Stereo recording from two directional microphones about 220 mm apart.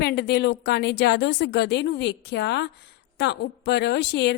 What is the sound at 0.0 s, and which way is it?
A woman's voice, 45° left (ahead or behind).